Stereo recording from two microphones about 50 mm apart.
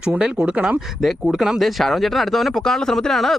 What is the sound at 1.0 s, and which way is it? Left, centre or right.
Speech, centre.